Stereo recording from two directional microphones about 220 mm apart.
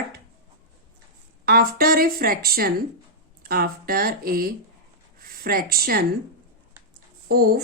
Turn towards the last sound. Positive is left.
turn(degrees=-45)  # may be behind; listen again after turning